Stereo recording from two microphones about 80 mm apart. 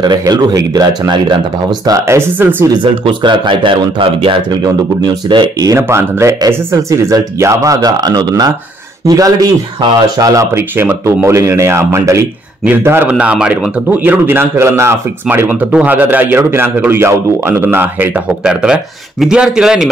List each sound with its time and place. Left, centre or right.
0.0 s speech: right
2.0 s speech: right
2.7 s a man's voice: right
5.8 s a man's voice: right
13.1 s a man's voice: centre
18.4 s a man's voice: centre